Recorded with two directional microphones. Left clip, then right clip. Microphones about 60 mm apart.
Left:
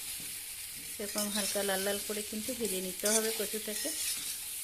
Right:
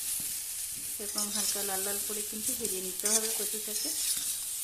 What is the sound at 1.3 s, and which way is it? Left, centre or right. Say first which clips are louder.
Speech: left 3 dB; left.